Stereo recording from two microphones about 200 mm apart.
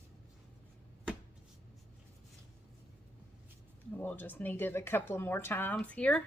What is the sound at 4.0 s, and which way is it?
A woman's voice, 10° left (ahead or behind).